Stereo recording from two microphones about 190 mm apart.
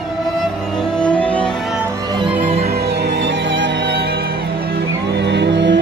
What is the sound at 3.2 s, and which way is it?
Music, 65° right (ahead or behind).